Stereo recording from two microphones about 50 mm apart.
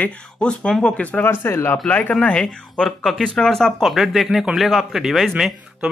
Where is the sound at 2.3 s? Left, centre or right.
Centre.